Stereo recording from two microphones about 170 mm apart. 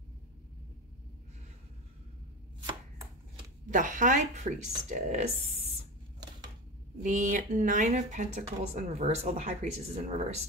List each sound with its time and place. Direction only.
3.6 s speech: 50° right (ahead or behind)
7.0 s speech: 45° right (ahead or behind)